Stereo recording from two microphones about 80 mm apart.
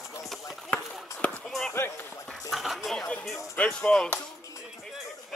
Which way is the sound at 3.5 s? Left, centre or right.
Centre.